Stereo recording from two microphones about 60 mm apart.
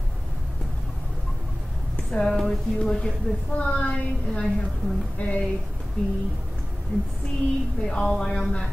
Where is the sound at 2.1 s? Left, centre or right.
Centre.